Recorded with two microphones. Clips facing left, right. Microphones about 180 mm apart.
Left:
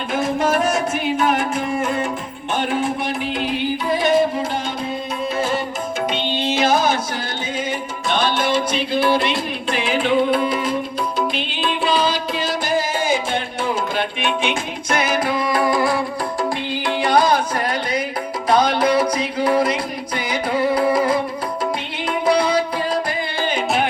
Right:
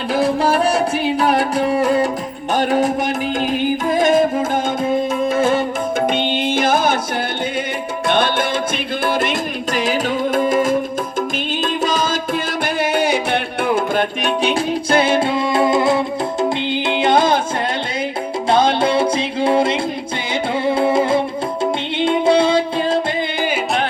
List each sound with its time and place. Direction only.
0.1 s music: 35° right (ahead or behind)
5.3 s music: 50° right (ahead or behind)
8.0 s music: 55° right (ahead or behind); by 17.4 s 25° right (ahead or behind)
18.4 s music: 25° right (ahead or behind)